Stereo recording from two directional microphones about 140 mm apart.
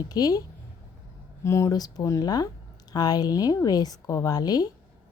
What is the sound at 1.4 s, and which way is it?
Speech, 20° left (ahead or behind).